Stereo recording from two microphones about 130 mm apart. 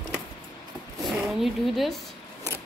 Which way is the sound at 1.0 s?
Centre (ahead or behind).